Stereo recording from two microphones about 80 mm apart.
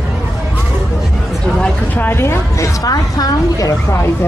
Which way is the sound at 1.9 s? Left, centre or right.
Left.